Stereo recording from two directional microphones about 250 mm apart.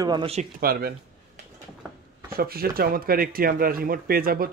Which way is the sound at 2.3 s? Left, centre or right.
Right.